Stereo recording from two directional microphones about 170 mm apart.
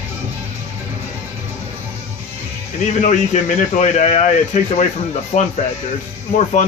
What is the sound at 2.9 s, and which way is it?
Speech, 45° left (ahead or behind).